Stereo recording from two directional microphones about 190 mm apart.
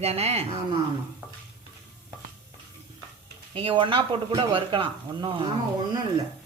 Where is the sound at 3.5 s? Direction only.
30° right (ahead or behind).